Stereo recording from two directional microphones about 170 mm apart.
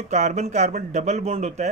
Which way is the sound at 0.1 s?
45° right (ahead or behind).